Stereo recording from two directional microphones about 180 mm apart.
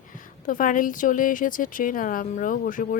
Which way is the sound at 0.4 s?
50° left (ahead or behind).